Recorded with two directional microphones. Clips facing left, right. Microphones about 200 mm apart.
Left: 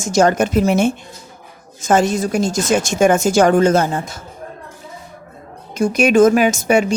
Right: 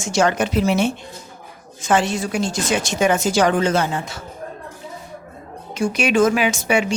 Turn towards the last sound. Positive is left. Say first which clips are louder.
# left 5 dB
turn(degrees=45)  # may be behind; listen again after turning